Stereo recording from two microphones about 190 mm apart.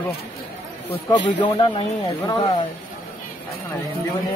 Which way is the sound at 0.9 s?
25° left (ahead or behind).